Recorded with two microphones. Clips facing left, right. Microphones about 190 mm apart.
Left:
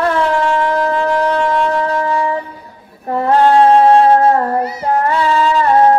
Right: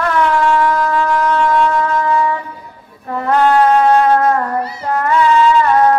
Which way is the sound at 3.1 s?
30° left (ahead or behind).